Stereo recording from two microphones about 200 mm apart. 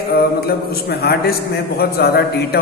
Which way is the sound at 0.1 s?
50° left (ahead or behind).